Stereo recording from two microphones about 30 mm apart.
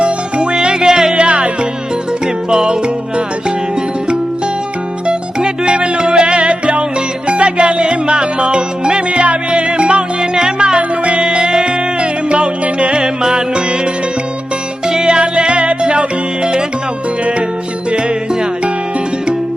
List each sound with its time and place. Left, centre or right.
0.0 s music: right
1.1 s music: right
2.5 s music: right
5.0 s music: right
9.2 s music: right
10.8 s music: right
11.2 s music: right
12.9 s music: right
14.8 s music: right